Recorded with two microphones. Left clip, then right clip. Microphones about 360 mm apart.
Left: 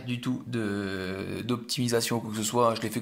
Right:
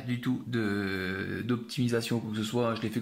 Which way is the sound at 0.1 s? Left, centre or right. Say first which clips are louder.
Even; centre.